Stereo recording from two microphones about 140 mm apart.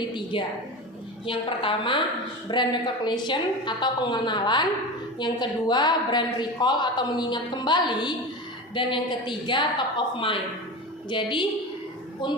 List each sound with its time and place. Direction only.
0.1 s a woman's voice: 35° left (ahead or behind)